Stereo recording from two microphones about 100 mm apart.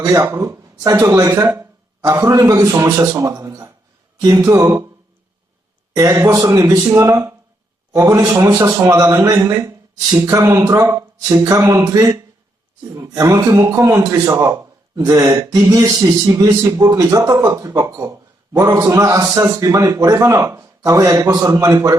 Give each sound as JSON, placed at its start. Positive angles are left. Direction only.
{"t": 0.0, "sound": "a man's voice", "side_deg": -30}
{"t": 6.0, "sound": "a man's voice", "side_deg": -30}